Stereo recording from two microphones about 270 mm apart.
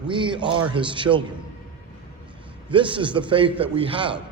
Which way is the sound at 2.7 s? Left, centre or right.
Centre.